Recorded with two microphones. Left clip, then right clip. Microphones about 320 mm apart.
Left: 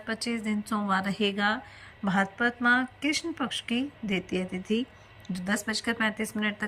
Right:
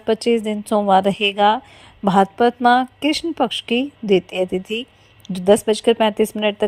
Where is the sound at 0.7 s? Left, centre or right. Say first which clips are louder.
Right 15 dB; right.